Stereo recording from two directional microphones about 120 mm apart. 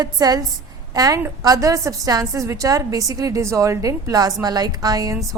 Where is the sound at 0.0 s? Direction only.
35° right (ahead or behind).